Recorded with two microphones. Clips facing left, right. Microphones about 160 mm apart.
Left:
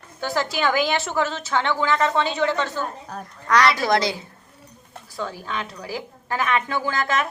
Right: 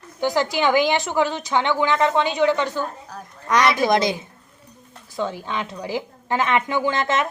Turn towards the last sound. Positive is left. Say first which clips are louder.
# right 3 dB
turn(degrees=-20)  # may be behind; listen again after turning